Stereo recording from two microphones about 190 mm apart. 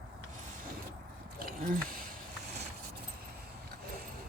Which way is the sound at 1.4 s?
50° right (ahead or behind).